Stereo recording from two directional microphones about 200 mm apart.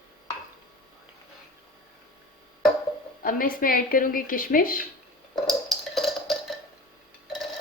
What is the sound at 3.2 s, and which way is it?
A woman's voice, 45° left (ahead or behind).